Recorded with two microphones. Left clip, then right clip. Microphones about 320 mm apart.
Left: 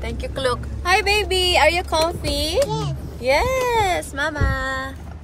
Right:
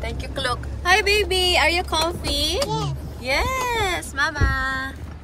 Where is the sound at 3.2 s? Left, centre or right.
Centre.